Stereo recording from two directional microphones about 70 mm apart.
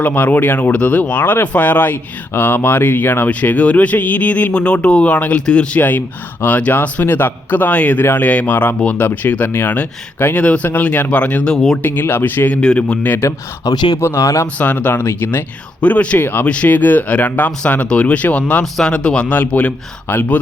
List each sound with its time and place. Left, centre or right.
0.0 s speech: left
11.5 s speech: centre
11.8 s speech: left
12.5 s speech: centre
13.7 s speech: left
14.0 s speech: left
14.4 s speech: left
15.8 s speech: centre
16.1 s speech: left